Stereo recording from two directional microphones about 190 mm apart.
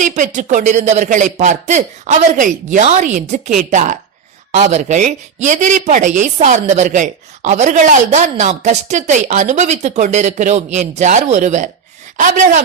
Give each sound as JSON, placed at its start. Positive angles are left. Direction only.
{"t": 0.0, "sound": "speech", "side_deg": -40}